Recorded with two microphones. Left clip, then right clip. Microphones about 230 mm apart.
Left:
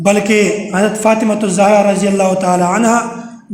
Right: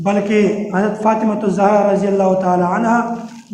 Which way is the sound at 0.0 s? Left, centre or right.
Left.